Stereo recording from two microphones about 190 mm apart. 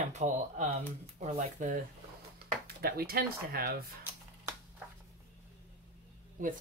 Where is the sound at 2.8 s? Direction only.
55° right (ahead or behind).